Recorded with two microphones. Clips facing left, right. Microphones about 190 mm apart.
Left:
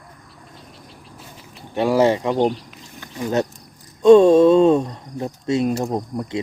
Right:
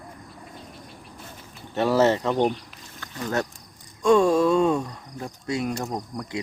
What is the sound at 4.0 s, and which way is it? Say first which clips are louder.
Speech: left 8 dB; 25° left (ahead or behind).